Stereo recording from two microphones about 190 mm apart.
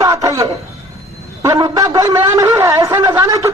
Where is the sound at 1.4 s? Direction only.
20° right (ahead or behind).